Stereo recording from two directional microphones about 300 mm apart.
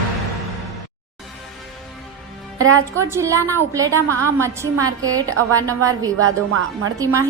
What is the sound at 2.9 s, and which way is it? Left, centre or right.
A woman's voice, centre.